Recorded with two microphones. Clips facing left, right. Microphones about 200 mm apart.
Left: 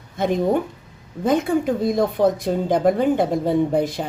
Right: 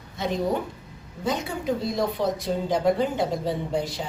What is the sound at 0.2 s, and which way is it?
A woman's voice, 50° left (ahead or behind).